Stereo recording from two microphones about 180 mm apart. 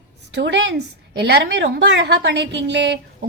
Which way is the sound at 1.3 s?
65° right (ahead or behind).